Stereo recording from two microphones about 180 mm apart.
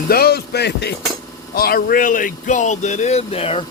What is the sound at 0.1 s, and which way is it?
Speech, 60° left (ahead or behind).